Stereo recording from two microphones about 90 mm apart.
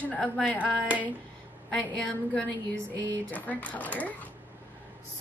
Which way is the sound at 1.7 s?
15° left (ahead or behind).